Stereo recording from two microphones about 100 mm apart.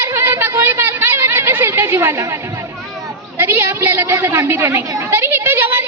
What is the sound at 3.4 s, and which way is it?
A woman's voice, 25° right (ahead or behind).